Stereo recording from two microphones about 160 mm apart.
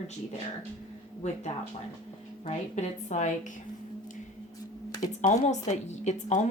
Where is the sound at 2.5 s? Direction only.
45° left (ahead or behind).